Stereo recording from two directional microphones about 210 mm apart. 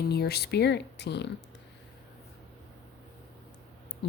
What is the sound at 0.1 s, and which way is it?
Speech, 50° left (ahead or behind).